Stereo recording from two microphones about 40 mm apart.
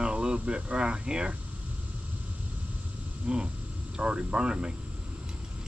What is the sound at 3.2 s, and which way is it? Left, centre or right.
Speech, right.